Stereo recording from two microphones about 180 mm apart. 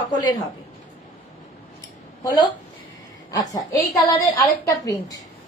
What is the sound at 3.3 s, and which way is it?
A woman's voice, 20° left (ahead or behind).